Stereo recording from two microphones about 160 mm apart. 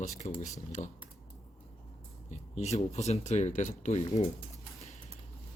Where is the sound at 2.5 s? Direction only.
45° left (ahead or behind).